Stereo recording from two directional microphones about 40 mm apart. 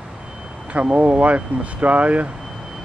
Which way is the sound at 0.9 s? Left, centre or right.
Right.